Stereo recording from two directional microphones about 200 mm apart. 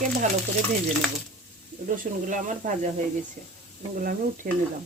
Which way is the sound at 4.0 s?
45° right (ahead or behind).